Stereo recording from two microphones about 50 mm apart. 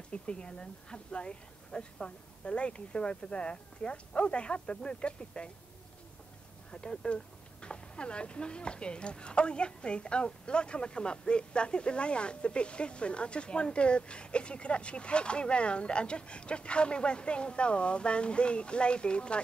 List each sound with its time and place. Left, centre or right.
0.1 s speech: left
6.7 s speech: centre